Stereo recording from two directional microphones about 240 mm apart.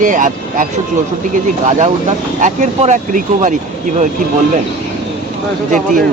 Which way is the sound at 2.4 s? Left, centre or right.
Right.